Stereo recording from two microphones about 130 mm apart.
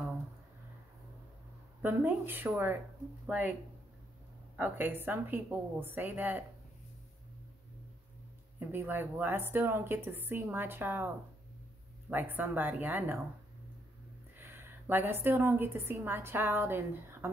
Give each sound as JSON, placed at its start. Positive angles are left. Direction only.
{"t": 1.8, "sound": "a woman's voice", "side_deg": -15}
{"t": 4.6, "sound": "a woman's voice", "side_deg": -15}
{"t": 8.5, "sound": "a woman's voice", "side_deg": -15}
{"t": 12.1, "sound": "a woman's voice", "side_deg": -15}
{"t": 14.4, "sound": "a woman's voice", "side_deg": -15}